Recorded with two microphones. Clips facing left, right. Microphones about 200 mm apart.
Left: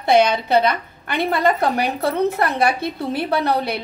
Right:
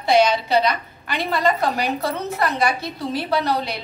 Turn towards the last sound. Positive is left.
turn(degrees=55)  # may be behind; listen again after turning